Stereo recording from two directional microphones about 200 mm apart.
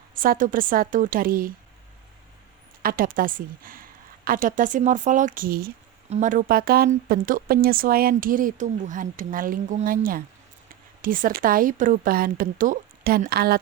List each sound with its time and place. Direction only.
0.1 s speech: 45° right (ahead or behind)
2.8 s speech: 45° right (ahead or behind)
6.1 s speech: 40° right (ahead or behind)